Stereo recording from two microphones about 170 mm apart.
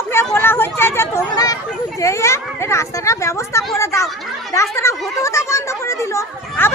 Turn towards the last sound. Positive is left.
turn(degrees=15)  # may be behind; listen again after turning